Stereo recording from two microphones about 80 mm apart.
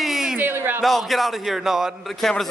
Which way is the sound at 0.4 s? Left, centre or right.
Right.